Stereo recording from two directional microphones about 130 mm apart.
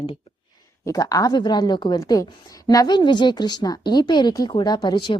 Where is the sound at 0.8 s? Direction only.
25° left (ahead or behind).